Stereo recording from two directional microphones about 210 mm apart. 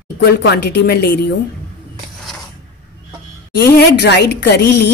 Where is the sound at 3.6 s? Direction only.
50° left (ahead or behind).